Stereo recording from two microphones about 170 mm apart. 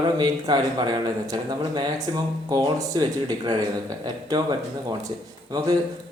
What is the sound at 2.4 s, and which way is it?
Speech, 20° right (ahead or behind).